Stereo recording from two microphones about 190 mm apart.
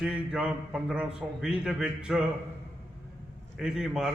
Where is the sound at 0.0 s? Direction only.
5° right (ahead or behind).